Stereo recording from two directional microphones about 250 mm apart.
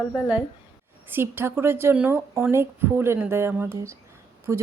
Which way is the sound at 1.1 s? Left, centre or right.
Centre.